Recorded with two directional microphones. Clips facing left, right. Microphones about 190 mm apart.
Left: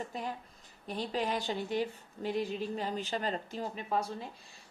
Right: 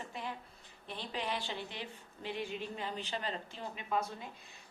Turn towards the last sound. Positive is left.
turn(degrees=35)  # may be behind; listen again after turning